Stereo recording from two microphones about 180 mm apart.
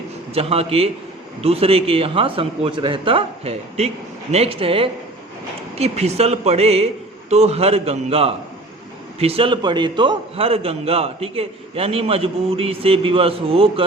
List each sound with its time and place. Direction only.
0.3 s a man's voice: 35° right (ahead or behind)